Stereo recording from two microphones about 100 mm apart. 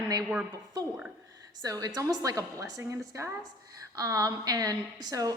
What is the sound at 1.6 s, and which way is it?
A woman's voice, 35° right (ahead or behind).